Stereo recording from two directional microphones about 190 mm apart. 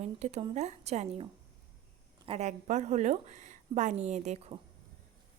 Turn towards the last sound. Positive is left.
turn(degrees=-35)  # may be behind; listen again after turning